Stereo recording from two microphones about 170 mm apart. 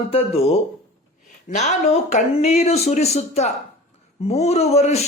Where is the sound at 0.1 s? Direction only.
35° left (ahead or behind).